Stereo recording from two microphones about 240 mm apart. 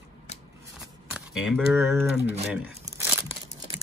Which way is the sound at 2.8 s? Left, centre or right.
Centre.